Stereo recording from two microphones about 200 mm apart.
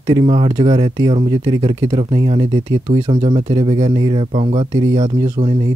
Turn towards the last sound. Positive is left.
turn(degrees=-20)  # may be behind; listen again after turning